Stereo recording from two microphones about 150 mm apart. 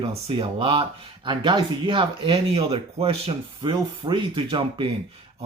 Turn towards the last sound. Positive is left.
turn(degrees=-35)  # may be behind; listen again after turning